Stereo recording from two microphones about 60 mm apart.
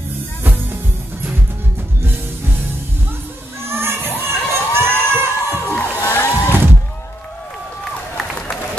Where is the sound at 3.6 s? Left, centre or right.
Right.